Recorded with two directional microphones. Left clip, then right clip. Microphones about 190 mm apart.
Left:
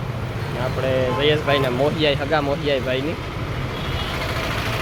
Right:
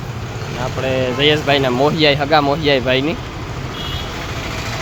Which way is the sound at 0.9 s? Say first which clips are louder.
Right 4 dB; 20° right (ahead or behind).